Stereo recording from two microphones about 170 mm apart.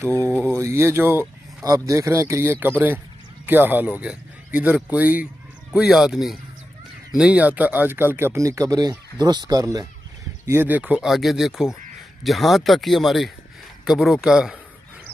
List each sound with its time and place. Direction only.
0.2 s speech: 10° left (ahead or behind)
0.5 s speech: 15° right (ahead or behind)
10.5 s speech: 10° right (ahead or behind)